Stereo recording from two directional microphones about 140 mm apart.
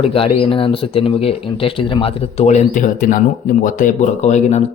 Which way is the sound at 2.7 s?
70° left (ahead or behind).